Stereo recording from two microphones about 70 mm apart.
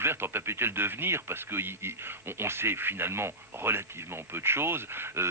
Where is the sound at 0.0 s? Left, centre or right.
Right.